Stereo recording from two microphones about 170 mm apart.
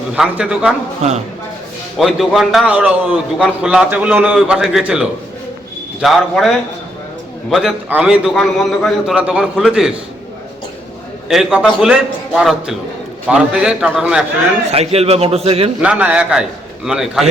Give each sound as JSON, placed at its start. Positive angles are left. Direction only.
{"t": 0.1, "sound": "a man's voice", "side_deg": -5}
{"t": 2.0, "sound": "a man's voice", "side_deg": 0}
{"t": 7.5, "sound": "a man's voice", "side_deg": -5}
{"t": 11.3, "sound": "a man's voice", "side_deg": -5}
{"t": 14.7, "sound": "a man's voice", "side_deg": -35}
{"t": 15.8, "sound": "a man's voice", "side_deg": -10}